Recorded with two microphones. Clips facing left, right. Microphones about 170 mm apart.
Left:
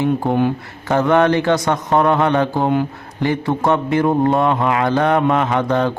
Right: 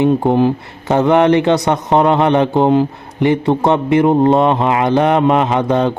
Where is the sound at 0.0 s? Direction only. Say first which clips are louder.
Right 5 dB; 25° right (ahead or behind).